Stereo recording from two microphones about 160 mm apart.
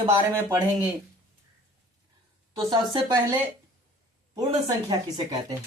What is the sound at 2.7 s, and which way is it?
Speech, 30° right (ahead or behind).